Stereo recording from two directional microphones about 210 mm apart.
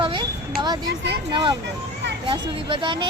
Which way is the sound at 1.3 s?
20° right (ahead or behind).